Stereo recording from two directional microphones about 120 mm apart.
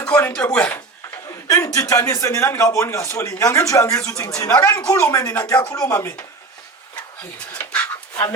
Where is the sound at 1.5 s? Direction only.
30° left (ahead or behind).